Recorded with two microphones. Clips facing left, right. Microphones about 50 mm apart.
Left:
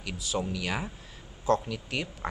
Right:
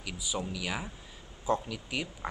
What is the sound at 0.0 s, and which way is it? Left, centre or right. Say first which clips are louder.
A man's voice: left 4 dB; centre.